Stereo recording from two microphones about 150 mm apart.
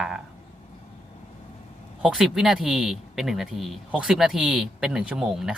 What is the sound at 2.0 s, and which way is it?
Speech, 5° right (ahead or behind).